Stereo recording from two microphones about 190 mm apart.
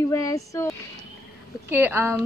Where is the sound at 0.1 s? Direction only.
15° left (ahead or behind).